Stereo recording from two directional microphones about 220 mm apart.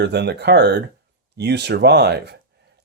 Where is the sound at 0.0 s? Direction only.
50° right (ahead or behind).